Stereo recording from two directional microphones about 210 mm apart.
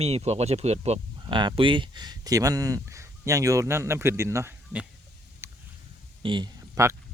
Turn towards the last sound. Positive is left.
turn(degrees=-15)  # may be behind; listen again after turning